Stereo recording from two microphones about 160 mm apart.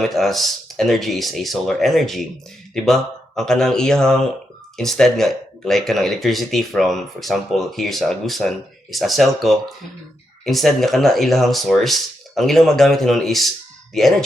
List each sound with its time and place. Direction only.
0.0 s speech: centre (ahead or behind)